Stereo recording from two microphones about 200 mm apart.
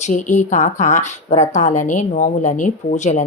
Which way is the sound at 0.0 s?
35° left (ahead or behind).